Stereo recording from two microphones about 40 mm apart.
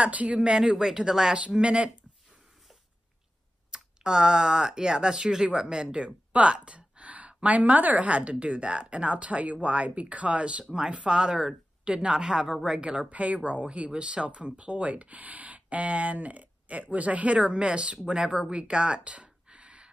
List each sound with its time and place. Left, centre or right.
0.0 s speech: right
0.4 s speech: centre
1.6 s speech: right
3.7 s speech: centre